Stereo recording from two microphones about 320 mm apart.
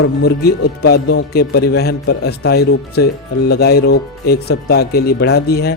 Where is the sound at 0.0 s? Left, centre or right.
Left.